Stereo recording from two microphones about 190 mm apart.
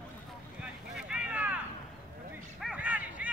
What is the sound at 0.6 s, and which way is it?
Boat, 5° right (ahead or behind).